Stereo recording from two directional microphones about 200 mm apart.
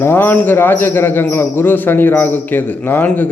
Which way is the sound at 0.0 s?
10° left (ahead or behind).